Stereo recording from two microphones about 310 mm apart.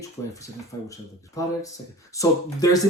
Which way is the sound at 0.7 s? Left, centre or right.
Centre.